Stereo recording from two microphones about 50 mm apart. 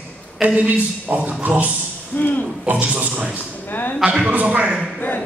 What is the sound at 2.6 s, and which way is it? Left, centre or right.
Speech, right.